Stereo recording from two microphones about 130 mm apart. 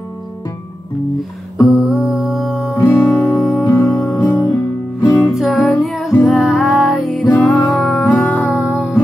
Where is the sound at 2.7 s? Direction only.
20° left (ahead or behind).